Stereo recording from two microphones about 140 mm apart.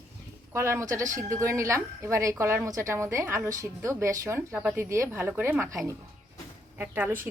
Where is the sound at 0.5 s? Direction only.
20° right (ahead or behind).